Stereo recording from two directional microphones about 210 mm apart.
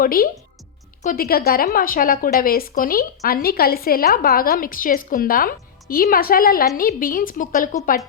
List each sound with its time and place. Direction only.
0.0 s a woman's voice: 45° left (ahead or behind)